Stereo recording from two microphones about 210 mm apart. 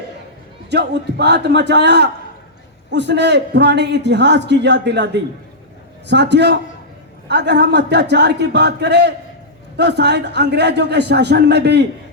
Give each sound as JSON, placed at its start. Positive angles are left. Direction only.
{"t": 0.7, "sound": "a man's voice", "side_deg": -55}